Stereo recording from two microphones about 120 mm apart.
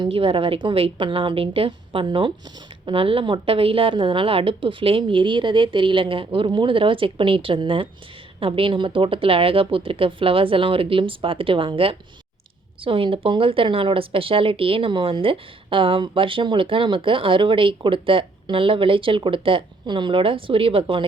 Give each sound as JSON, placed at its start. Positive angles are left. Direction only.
{"t": 0.0, "sound": "speech", "side_deg": -50}